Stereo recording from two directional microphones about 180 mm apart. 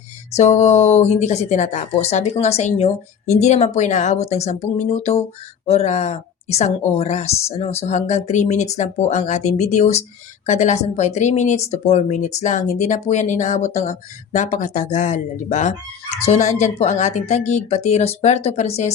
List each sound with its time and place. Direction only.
0.3 s speech: 35° left (ahead or behind)